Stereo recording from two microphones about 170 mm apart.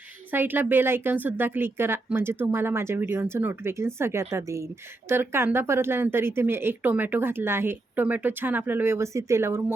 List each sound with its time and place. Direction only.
0.3 s speech: 10° right (ahead or behind)